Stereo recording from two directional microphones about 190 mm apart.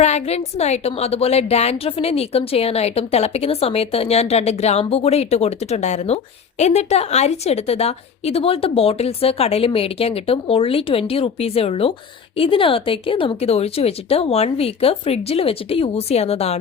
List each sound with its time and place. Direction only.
0.0 s a woman's voice: 35° left (ahead or behind)